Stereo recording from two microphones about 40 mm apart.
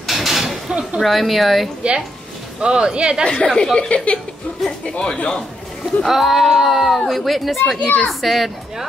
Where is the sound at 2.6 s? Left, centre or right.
Right.